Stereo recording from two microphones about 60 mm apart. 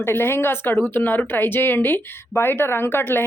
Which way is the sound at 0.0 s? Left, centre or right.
Left.